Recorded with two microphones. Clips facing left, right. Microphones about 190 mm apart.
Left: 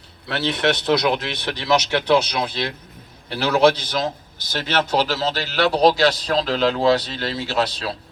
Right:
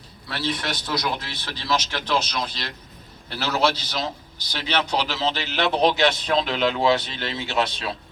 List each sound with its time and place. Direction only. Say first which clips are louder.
0.3 s a man's voice: left 7 dB; 65° left (ahead or behind); by 7.9 s 35° left (ahead or behind)